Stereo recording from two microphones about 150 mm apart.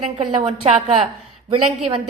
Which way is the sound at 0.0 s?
40° right (ahead or behind).